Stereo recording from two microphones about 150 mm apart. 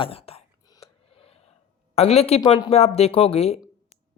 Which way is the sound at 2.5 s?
40° left (ahead or behind).